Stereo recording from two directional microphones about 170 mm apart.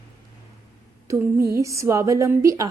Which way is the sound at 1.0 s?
15° right (ahead or behind).